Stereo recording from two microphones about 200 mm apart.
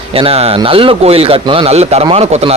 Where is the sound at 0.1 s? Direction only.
30° right (ahead or behind).